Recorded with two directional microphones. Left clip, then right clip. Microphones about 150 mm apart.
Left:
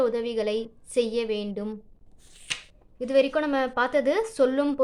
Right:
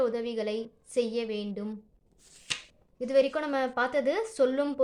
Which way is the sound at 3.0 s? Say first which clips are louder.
Left 3 dB; 20° left (ahead or behind).